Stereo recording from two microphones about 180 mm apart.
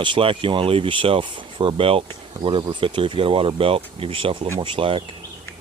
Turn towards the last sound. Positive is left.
turn(degrees=-30)  # may be behind; listen again after turning